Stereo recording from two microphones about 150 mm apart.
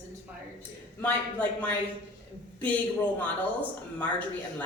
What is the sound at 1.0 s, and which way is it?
Speech, 10° left (ahead or behind).